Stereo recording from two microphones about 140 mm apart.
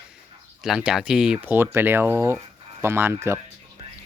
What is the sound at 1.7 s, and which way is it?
Speech, 15° right (ahead or behind).